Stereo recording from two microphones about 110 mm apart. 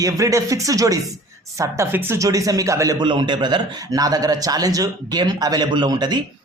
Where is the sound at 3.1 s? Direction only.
45° right (ahead or behind).